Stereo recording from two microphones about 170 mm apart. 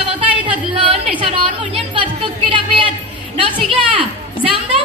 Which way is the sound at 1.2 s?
30° right (ahead or behind).